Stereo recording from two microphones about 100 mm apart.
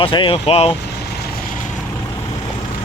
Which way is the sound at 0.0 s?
60° left (ahead or behind).